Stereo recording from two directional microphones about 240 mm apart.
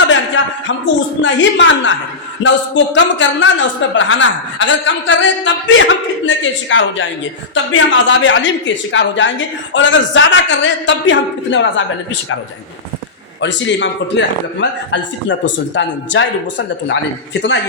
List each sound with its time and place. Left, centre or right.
1.2 s a man's voice: left
13.4 s a man's voice: left